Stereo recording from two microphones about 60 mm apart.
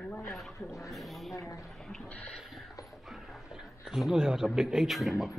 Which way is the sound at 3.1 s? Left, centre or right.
Centre.